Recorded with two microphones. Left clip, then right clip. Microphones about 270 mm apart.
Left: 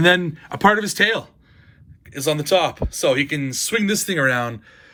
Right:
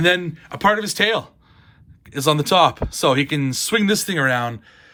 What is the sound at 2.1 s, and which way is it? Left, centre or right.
Speech, centre.